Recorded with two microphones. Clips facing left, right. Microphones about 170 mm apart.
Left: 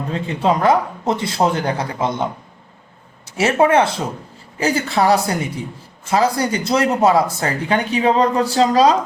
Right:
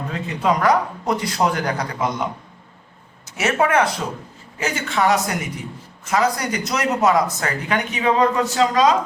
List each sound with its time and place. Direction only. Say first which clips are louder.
0.1 s a man's voice: left 3 dB; 30° left (ahead or behind)
3.2 s a man's voice: left 5 dB; 30° left (ahead or behind)